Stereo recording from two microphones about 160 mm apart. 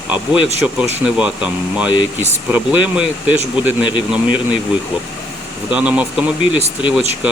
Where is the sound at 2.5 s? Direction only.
10° right (ahead or behind).